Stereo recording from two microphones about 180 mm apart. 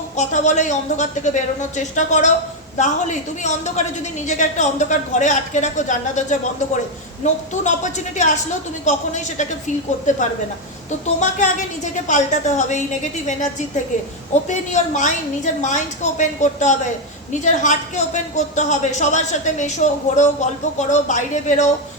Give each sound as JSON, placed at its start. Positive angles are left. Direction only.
{"t": 0.2, "sound": "a woman's voice", "side_deg": 40}
{"t": 7.5, "sound": "a woman's voice", "side_deg": 40}